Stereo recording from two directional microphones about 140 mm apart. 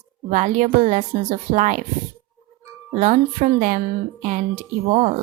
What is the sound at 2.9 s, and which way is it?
Speech, 60° right (ahead or behind).